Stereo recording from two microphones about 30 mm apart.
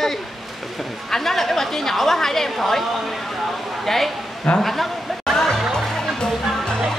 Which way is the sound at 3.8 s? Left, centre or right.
Centre.